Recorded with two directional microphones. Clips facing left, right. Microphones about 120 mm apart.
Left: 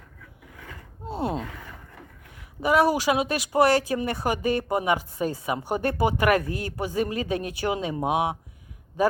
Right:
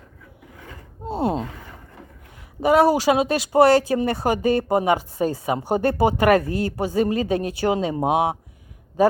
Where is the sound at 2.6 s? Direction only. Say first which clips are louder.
Right 5 dB; 30° right (ahead or behind).